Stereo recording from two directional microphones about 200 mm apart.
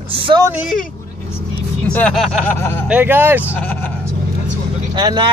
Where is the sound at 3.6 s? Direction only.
10° left (ahead or behind).